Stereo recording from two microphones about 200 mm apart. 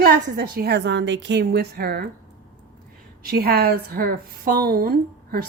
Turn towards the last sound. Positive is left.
turn(degrees=-45)  # may be behind; listen again after turning